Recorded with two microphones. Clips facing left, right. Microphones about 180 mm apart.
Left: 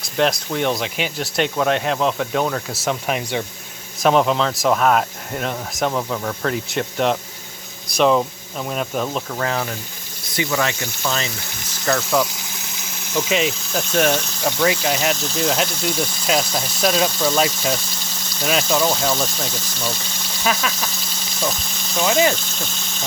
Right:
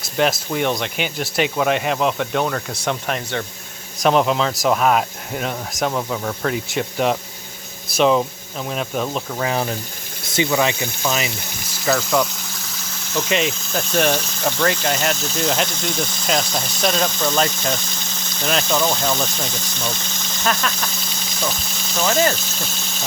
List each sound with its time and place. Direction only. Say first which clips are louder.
0.0 s speech: even; 5° right (ahead or behind)
9.5 s speech: right 2 dB; 20° right (ahead or behind)
11.7 s speech: right 1 dB; centre (ahead or behind)
21.9 s speech: left 1 dB; centre (ahead or behind)